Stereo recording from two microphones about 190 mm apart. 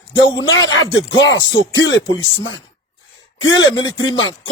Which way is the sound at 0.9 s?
75° left (ahead or behind).